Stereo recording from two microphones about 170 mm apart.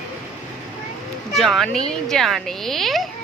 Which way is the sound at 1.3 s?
Centre (ahead or behind).